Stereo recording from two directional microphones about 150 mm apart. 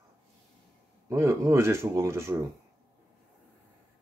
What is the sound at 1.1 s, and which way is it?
Speech, 20° right (ahead or behind).